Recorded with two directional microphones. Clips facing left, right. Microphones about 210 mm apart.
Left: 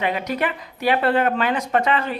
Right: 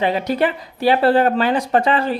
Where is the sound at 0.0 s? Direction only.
30° right (ahead or behind).